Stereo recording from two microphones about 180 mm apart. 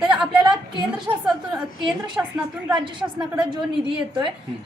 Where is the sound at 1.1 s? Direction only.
10° right (ahead or behind).